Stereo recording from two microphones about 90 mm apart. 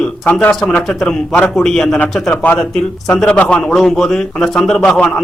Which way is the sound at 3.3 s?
15° left (ahead or behind).